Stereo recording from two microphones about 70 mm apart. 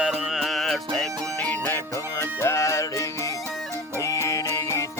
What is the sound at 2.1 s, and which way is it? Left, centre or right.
Music, left.